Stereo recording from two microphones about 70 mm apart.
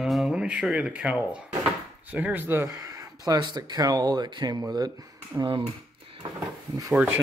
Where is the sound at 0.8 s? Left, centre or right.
Centre.